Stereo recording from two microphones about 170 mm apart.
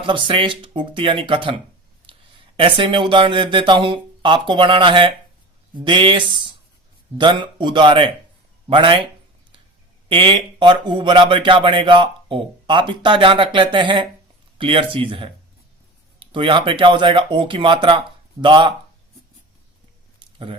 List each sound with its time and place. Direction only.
0.0 s speech: 30° right (ahead or behind)
2.6 s speech: 30° right (ahead or behind)
10.1 s speech: 30° right (ahead or behind)